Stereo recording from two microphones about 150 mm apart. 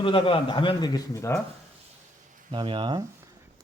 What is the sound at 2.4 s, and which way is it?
Speech, 35° right (ahead or behind).